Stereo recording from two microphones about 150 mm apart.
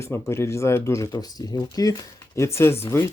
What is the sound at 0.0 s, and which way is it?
Speech, 15° left (ahead or behind).